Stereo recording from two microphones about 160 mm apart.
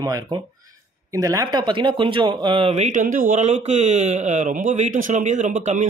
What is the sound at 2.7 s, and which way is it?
Speech, 45° right (ahead or behind).